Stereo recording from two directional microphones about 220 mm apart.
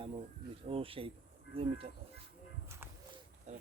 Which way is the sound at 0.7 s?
25° right (ahead or behind).